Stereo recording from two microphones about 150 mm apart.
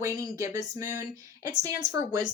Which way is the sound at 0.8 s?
60° left (ahead or behind).